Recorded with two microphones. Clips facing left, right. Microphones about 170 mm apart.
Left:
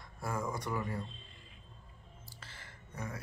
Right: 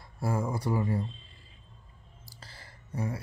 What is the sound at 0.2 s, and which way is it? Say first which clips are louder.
Speech: right 6 dB; 30° right (ahead or behind).